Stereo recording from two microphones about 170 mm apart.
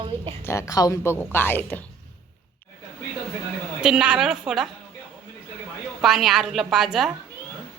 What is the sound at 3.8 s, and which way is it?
Speech, 5° right (ahead or behind).